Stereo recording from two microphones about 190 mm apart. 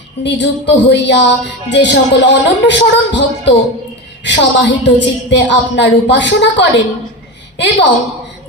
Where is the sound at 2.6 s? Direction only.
70° left (ahead or behind).